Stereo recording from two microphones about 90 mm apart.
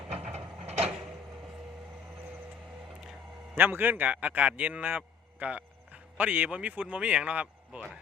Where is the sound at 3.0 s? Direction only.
5° right (ahead or behind).